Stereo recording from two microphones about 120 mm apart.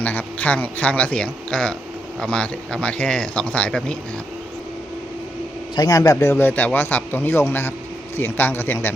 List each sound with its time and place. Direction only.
0.0 s speech: 10° left (ahead or behind)
5.7 s a man's voice: 30° left (ahead or behind); by 9.0 s 15° left (ahead or behind)